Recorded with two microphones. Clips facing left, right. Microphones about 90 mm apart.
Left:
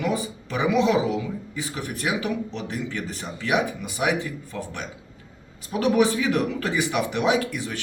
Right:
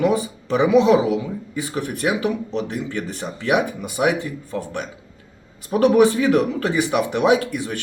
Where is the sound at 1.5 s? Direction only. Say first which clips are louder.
Right 5 dB; 40° right (ahead or behind).